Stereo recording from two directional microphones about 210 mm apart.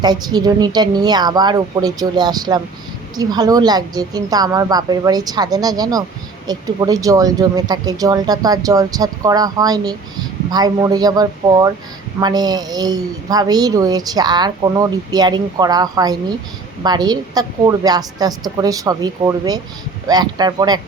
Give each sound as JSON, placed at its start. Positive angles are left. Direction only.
{"t": 0.0, "sound": "speech", "side_deg": -20}